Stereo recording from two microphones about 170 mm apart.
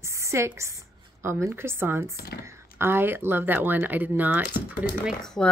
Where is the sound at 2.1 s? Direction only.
65° left (ahead or behind).